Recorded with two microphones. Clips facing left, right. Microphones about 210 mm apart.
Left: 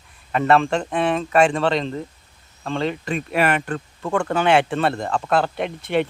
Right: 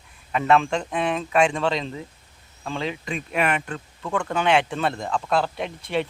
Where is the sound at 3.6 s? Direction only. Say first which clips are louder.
Left 5 dB; 55° left (ahead or behind).